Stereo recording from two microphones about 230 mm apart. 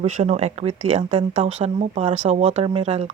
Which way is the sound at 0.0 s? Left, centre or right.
Right.